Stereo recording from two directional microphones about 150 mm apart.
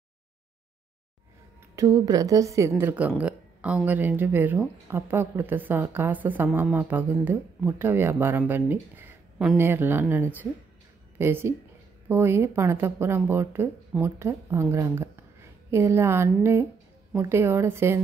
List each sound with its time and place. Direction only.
1.8 s a woman's voice: 20° right (ahead or behind)